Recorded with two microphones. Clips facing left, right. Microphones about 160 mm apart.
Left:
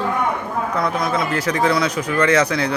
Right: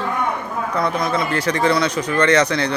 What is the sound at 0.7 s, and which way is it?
Speech, centre (ahead or behind).